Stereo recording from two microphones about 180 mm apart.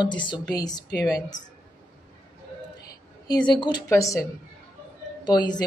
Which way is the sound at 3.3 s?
25° left (ahead or behind).